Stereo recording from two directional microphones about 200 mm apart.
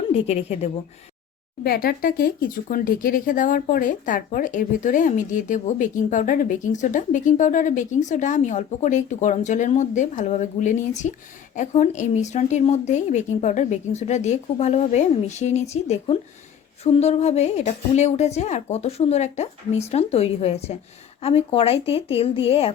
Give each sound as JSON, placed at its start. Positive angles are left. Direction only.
{"t": 0.1, "sound": "speech", "side_deg": 30}
{"t": 1.6, "sound": "a woman's voice", "side_deg": 50}